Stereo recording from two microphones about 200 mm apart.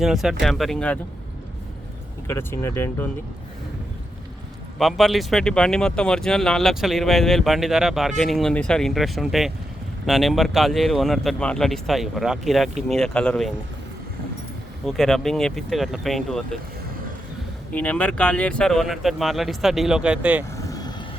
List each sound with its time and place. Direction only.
0.0 s speech: centre (ahead or behind)
2.2 s speech: 15° left (ahead or behind)
4.8 s speech: centre (ahead or behind)
14.8 s speech: centre (ahead or behind)
17.7 s speech: 5° left (ahead or behind)
20.7 s vehicle: 20° left (ahead or behind)